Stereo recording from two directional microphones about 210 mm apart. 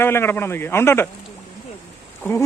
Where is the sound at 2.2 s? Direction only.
10° left (ahead or behind).